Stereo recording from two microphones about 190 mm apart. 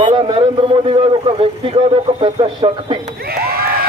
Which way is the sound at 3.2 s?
55° right (ahead or behind).